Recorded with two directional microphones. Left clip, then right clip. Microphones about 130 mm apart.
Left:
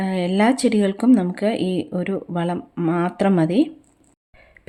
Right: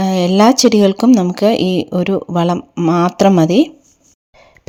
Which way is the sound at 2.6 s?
30° right (ahead or behind).